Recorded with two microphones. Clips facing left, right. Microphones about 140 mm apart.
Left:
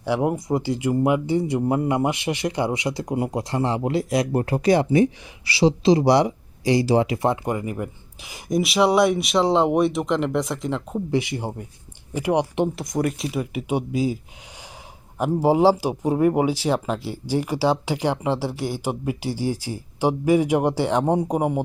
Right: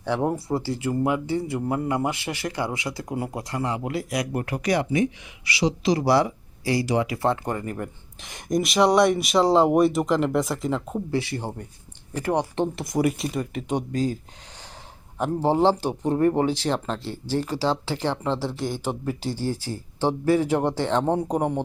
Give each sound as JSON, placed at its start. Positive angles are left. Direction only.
{"t": 0.0, "sound": "speech", "side_deg": 10}
{"t": 7.2, "sound": "speech", "side_deg": 15}
{"t": 11.1, "sound": "speech", "side_deg": 15}
{"t": 12.7, "sound": "speech", "side_deg": -5}
{"t": 15.2, "sound": "speech", "side_deg": 10}